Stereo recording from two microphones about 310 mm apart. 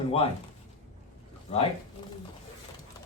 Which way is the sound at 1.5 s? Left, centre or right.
Centre.